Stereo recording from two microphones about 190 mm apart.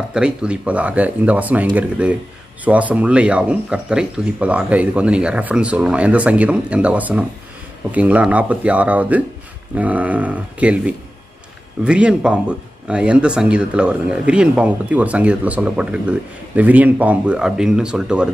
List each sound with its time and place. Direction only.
0.1 s speech: 5° right (ahead or behind)